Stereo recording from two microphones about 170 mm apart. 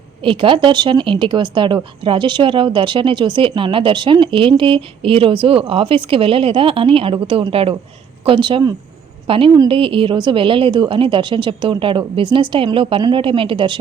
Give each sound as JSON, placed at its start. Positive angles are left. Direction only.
{"t": 0.2, "sound": "a woman's voice", "side_deg": -30}